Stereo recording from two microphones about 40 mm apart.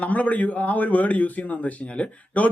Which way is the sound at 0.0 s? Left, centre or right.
Left.